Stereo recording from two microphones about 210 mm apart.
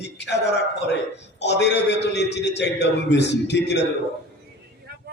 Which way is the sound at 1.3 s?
55° left (ahead or behind).